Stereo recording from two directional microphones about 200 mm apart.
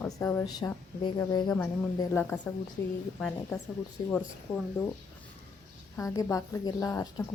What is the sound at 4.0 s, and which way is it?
Speech, 20° left (ahead or behind).